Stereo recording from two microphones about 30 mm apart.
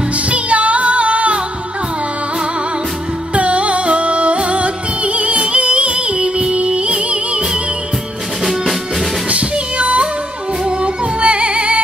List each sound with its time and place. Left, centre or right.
0.3 s music: right
3.3 s music: right
9.3 s music: right